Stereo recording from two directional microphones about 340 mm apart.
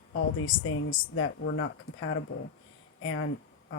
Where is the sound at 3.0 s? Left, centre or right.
Left.